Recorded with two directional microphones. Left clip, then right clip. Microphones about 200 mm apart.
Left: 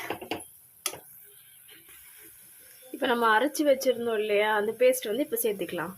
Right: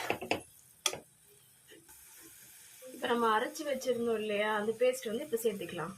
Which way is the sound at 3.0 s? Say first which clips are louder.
Left 7 dB; 50° left (ahead or behind).